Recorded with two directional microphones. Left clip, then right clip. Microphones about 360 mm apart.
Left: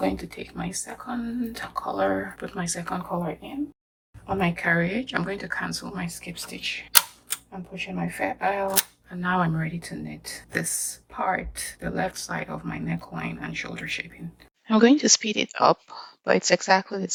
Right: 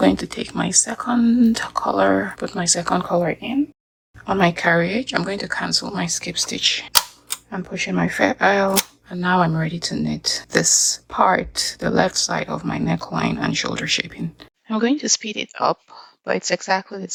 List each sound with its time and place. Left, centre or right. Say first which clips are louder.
0.0 s speech: right 9 dB; right
4.3 s speech: right 7 dB; centre
14.7 s speech: left 2 dB; centre